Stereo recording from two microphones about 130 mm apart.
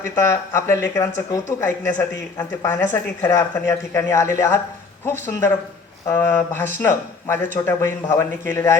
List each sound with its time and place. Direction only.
0.2 s speech: 20° left (ahead or behind)